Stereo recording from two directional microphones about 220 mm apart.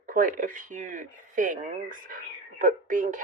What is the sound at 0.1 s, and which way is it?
Speech, 40° right (ahead or behind).